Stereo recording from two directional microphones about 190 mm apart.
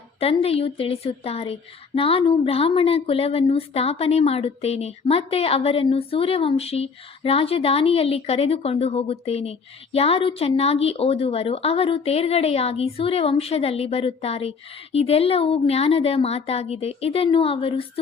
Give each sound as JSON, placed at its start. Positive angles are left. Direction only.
{"t": 0.2, "sound": "speech", "side_deg": 30}